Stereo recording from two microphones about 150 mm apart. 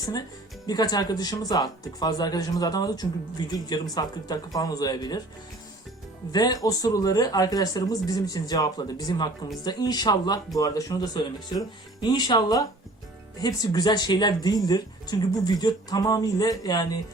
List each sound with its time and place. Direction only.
0.0 s speech: 25° left (ahead or behind)
6.3 s speech: 25° left (ahead or behind)